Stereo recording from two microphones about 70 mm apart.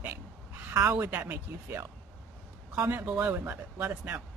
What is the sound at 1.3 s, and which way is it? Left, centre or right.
Speech, right.